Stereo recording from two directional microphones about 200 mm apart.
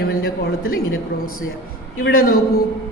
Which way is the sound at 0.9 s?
90° left.